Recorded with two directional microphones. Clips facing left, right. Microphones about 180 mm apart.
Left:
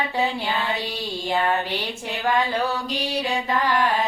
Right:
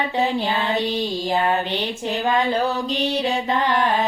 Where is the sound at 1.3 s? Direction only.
20° right (ahead or behind).